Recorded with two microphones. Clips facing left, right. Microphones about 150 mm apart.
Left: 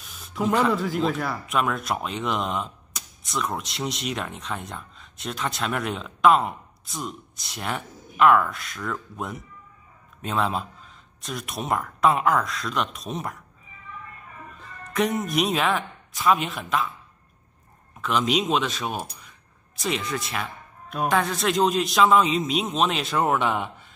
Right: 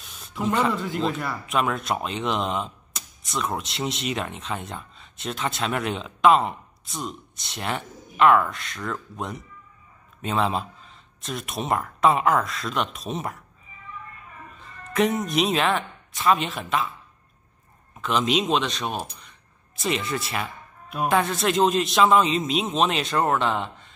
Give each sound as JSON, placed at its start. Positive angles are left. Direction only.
{"t": 0.0, "sound": "speech", "side_deg": 0}
{"t": 14.6, "sound": "speech", "side_deg": 0}
{"t": 18.0, "sound": "speech", "side_deg": 0}